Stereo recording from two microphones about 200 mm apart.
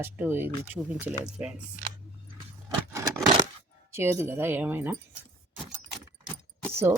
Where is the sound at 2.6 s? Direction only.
15° right (ahead or behind).